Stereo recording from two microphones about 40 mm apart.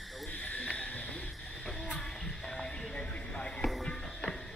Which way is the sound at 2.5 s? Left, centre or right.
Left.